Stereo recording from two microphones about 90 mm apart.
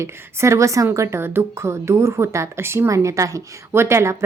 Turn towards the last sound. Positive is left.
turn(degrees=-30)  # may be behind; listen again after turning